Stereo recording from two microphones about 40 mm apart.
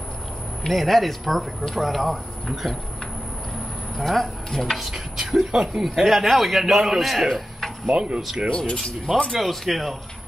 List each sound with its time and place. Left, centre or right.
0.7 s a man's voice: centre
4.0 s speech: centre
4.7 s a sound: centre
6.0 s a man's voice: centre
7.9 s speech: right
8.5 s a man's voice: left; by 9.9 s centre